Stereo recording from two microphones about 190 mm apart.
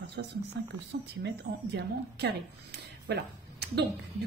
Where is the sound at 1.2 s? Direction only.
65° right (ahead or behind).